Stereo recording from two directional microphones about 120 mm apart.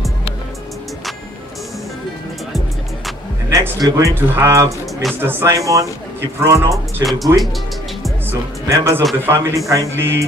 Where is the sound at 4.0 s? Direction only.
25° right (ahead or behind).